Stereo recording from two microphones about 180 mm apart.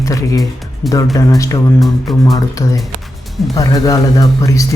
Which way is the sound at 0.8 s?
Centre (ahead or behind).